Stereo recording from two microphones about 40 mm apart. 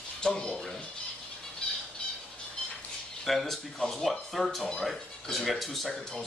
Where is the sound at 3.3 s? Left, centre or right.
Centre.